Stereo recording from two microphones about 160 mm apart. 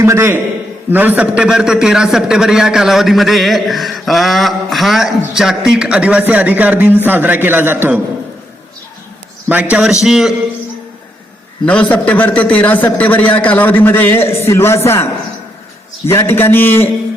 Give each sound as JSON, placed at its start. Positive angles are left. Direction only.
{"t": 0.0, "sound": "a man's voice", "side_deg": -15}
{"t": 9.5, "sound": "a man's voice", "side_deg": -10}
{"t": 11.6, "sound": "a man's voice", "side_deg": 10}